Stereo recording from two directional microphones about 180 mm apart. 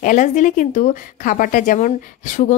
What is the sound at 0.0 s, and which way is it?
Speech, 45° left (ahead or behind).